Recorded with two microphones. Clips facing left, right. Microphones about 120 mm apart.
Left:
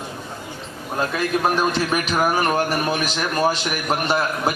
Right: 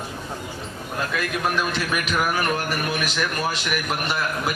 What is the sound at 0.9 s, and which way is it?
A man's voice, 35° left (ahead or behind).